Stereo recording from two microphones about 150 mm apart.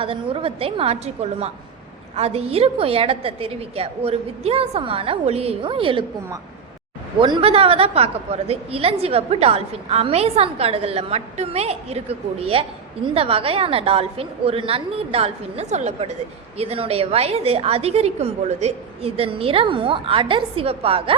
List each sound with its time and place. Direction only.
0.0 s a woman's voice: 35° right (ahead or behind)
7.2 s a woman's voice: 35° right (ahead or behind)